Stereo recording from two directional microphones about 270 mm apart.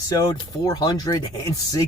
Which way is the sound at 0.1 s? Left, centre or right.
Centre.